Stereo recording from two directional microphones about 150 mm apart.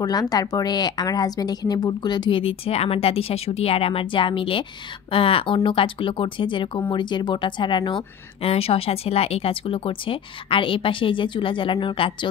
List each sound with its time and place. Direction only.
0.0 s speech: 25° left (ahead or behind)